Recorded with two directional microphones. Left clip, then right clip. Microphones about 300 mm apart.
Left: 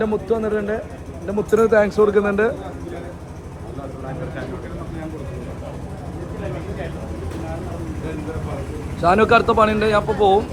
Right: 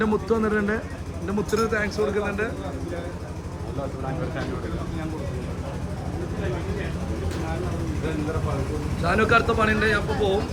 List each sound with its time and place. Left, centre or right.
0.0 s speech: centre
9.0 s speech: centre